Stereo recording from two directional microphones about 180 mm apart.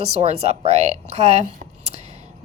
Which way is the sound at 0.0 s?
35° right (ahead or behind).